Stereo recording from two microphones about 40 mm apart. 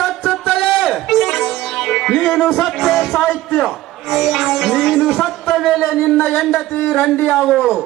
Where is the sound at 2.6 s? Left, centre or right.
Centre.